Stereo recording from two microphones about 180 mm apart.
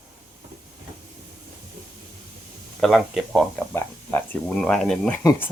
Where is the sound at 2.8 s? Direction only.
Centre (ahead or behind).